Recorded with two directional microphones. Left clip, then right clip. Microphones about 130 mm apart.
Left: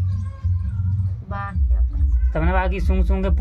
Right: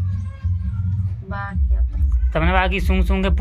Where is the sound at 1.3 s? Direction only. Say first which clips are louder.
Right 1 dB; 35° left (ahead or behind).